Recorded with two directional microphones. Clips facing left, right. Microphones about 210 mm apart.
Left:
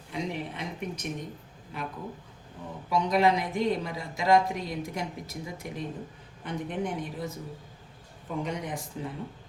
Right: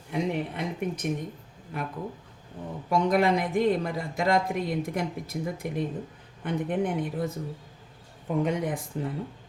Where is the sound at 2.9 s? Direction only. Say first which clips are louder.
Right 1 dB; 50° right (ahead or behind).